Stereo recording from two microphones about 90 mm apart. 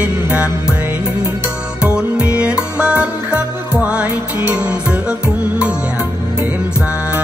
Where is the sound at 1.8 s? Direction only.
15° right (ahead or behind).